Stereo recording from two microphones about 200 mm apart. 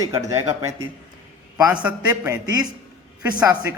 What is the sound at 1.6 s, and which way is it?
Speech, 15° right (ahead or behind).